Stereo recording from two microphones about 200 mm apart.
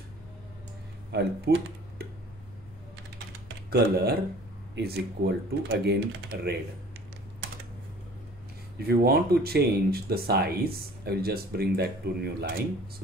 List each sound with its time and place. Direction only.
1.5 s speech: 50° right (ahead or behind)
3.7 s speech: 50° right (ahead or behind)
8.7 s speech: 50° right (ahead or behind)